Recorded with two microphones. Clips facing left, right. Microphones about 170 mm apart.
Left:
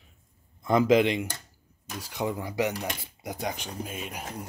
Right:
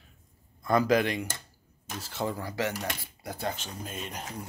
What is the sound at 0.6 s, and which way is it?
A man's voice, 20° left (ahead or behind).